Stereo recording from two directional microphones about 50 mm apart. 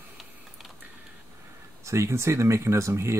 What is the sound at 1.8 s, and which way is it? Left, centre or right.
Speech, right.